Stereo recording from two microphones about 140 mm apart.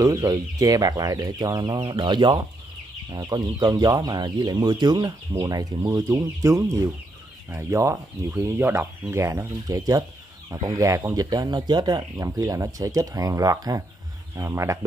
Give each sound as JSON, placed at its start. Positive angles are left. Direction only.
{"t": 0.0, "sound": "speech", "side_deg": -20}